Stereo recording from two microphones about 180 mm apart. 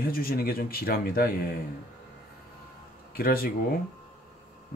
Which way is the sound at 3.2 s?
55° left (ahead or behind).